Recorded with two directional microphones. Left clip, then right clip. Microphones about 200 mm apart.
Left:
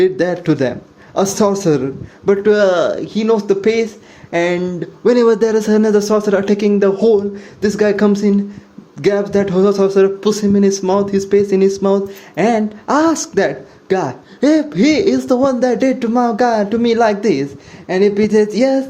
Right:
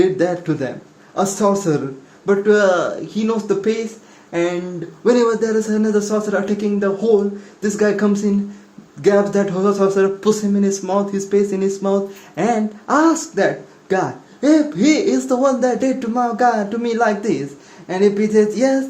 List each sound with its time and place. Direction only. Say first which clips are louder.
0.0 s speech: left 2 dB; 30° left (ahead or behind)
14.4 s speech: left 2 dB; 30° left (ahead or behind)
17.8 s speech: left 3 dB; 15° left (ahead or behind)
18.3 s speech: left 2 dB; 25° left (ahead or behind)